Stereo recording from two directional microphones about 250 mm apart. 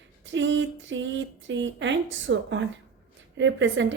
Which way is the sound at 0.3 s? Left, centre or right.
Right.